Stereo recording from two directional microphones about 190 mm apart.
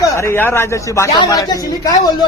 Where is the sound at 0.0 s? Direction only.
15° left (ahead or behind).